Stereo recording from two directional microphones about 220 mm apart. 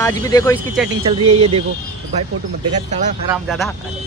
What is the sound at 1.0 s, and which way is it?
Speech, 25° right (ahead or behind).